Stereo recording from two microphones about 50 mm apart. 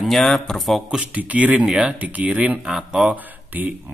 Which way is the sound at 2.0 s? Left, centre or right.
Right.